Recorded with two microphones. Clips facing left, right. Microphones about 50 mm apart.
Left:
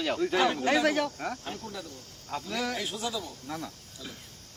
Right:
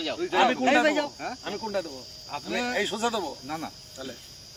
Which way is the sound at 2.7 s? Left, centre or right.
Right.